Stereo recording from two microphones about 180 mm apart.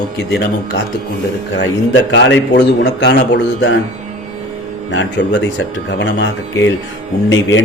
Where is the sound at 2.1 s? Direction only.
85° left.